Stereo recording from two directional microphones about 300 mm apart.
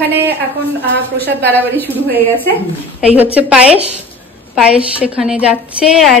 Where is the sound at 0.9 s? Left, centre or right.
Centre.